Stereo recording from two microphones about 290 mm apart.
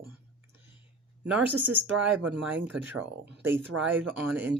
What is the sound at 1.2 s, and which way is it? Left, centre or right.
A woman's voice, centre.